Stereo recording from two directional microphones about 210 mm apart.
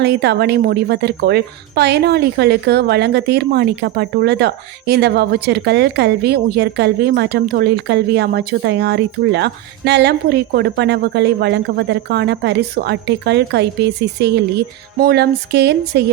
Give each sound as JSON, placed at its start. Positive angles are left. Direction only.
{"t": 0.0, "sound": "speech", "side_deg": -50}